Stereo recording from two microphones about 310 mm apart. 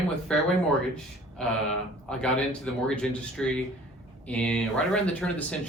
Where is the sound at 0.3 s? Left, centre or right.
Centre.